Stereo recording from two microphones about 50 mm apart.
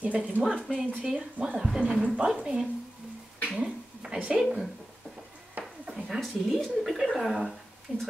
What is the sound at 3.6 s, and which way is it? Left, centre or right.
Speech, centre.